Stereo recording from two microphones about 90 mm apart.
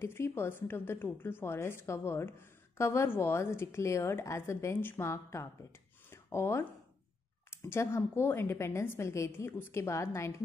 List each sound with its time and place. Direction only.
0.0 s a woman's voice: 25° left (ahead or behind)
6.0 s a sound: 30° left (ahead or behind)
7.5 s a woman's voice: 30° left (ahead or behind)